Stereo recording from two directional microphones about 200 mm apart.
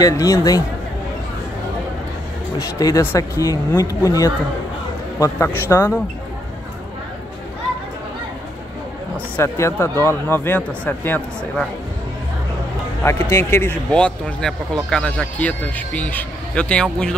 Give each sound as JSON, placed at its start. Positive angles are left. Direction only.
{"t": 0.0, "sound": "a man's voice", "side_deg": 15}
{"t": 2.8, "sound": "a man's voice", "side_deg": 15}
{"t": 9.1, "sound": "a man's voice", "side_deg": 15}
{"t": 13.0, "sound": "a man's voice", "side_deg": 10}